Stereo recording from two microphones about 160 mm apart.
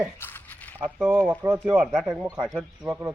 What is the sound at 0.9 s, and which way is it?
Speech, 5° right (ahead or behind).